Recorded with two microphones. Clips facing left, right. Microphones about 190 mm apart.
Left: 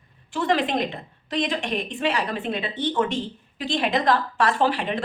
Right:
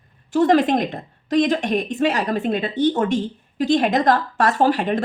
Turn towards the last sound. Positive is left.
turn(degrees=-45)  # may be behind; listen again after turning